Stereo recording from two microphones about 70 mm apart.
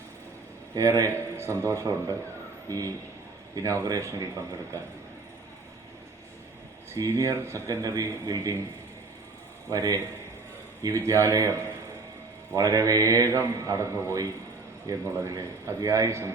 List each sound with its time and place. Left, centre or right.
0.8 s a man's voice: right
2.6 s a man's voice: right
6.9 s a man's voice: right
7.3 s a man's voice: right
9.6 s mantra: right
10.8 s a man's voice: right
12.5 s mantra: right
13.3 s a man's voice: right
15.8 s mantra: right
16.0 s a man's voice: right